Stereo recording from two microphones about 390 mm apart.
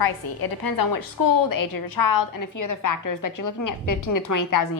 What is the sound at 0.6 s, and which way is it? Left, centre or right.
A woman's voice, left.